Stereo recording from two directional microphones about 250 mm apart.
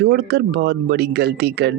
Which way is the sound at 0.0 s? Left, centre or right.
Right.